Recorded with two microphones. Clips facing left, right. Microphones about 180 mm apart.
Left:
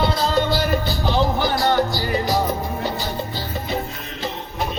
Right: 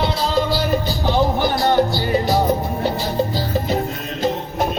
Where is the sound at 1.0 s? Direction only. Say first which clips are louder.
Right 3 dB; 15° right (ahead or behind).